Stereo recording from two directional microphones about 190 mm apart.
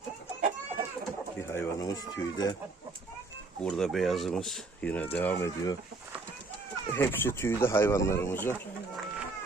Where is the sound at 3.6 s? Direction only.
Centre (ahead or behind).